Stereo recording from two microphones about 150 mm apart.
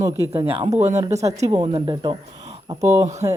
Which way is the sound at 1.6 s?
35° right (ahead or behind).